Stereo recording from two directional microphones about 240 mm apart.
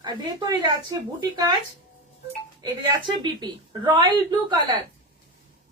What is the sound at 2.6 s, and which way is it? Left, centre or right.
A woman's voice, centre.